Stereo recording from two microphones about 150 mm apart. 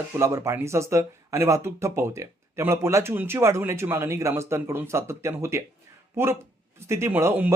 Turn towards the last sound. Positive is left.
turn(degrees=-15)  # may be behind; listen again after turning